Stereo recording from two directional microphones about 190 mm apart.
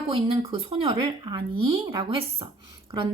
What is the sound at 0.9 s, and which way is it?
A woman's voice, 20° right (ahead or behind).